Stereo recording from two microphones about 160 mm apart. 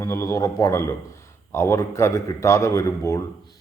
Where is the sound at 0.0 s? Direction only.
15° left (ahead or behind).